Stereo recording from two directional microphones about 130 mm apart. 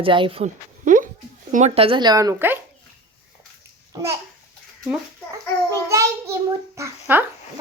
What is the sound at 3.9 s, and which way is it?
Babbling, 25° right (ahead or behind).